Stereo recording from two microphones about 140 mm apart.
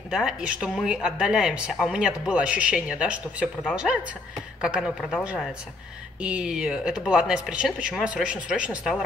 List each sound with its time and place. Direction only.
0.1 s speech: 5° right (ahead or behind)